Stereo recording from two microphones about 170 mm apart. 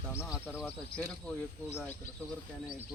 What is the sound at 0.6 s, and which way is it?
Speech, 10° left (ahead or behind).